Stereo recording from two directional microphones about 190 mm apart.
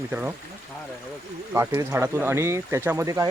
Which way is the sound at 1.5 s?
15° right (ahead or behind).